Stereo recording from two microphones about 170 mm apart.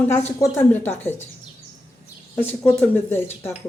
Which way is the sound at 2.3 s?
10° left (ahead or behind).